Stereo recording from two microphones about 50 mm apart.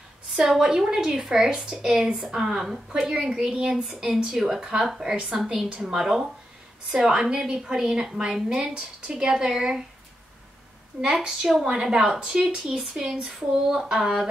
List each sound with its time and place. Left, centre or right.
0.3 s a woman's voice: centre
3.2 s a woman's voice: centre
11.0 s a woman's voice: centre